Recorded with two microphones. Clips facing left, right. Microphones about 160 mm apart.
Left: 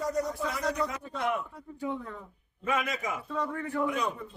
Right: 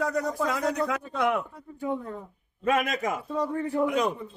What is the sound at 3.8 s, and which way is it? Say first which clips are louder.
Speech: right 5 dB; 90° right.